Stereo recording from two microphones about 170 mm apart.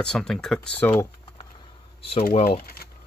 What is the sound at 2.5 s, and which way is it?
Speech, 60° left (ahead or behind).